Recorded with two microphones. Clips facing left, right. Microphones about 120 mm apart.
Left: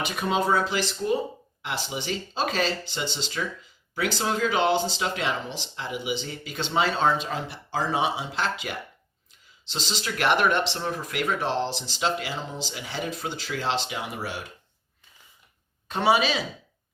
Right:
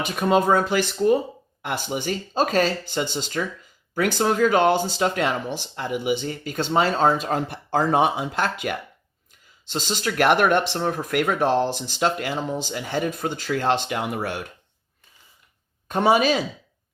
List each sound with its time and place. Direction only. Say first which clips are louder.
0.0 s speech: right 5 dB; 50° right (ahead or behind)
15.9 s speech: right 4 dB; 45° right (ahead or behind)